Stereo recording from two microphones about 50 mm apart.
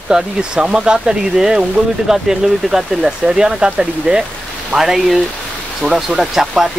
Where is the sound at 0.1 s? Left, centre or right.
Centre.